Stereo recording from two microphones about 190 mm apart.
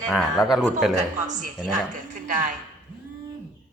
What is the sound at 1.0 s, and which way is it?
Speech, 40° right (ahead or behind).